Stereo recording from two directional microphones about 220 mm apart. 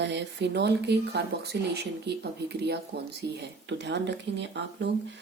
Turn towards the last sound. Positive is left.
turn(degrees=-55)  # may be behind; listen again after turning